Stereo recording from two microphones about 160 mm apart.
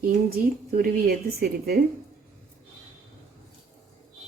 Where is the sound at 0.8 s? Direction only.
75° right (ahead or behind).